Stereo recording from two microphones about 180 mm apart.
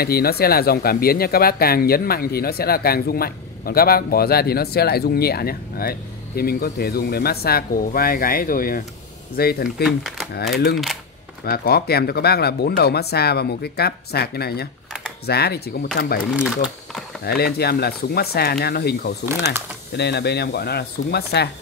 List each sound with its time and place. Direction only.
0.0 s speech: 60° left (ahead or behind)
9.8 s speech: centre (ahead or behind)
10.5 s speech: 60° left (ahead or behind)
16.3 s speech: 5° right (ahead or behind)
17.2 s speech: 60° left (ahead or behind)
19.2 s speech: 15° right (ahead or behind)
20.0 s speech: 65° left (ahead or behind)